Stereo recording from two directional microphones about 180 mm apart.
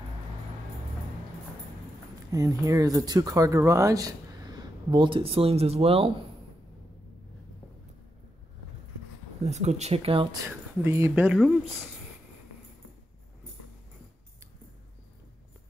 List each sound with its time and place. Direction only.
2.3 s speech: 15° right (ahead or behind); by 6.1 s 35° right (ahead or behind)
9.4 s speech: 40° right (ahead or behind)
10.4 s speech: 15° right (ahead or behind)